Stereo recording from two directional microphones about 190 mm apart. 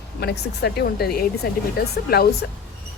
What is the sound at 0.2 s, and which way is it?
Speech, 60° left (ahead or behind).